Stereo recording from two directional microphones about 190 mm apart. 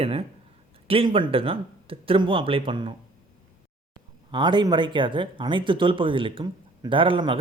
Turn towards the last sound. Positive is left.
turn(degrees=-25)  # may be behind; listen again after turning